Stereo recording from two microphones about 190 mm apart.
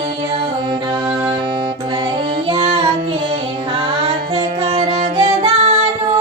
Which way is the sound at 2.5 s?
30° right (ahead or behind).